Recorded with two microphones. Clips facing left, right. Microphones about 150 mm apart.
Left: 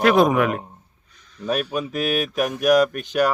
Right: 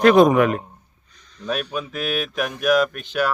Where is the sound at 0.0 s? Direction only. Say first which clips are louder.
Right 3 dB; 5° left (ahead or behind).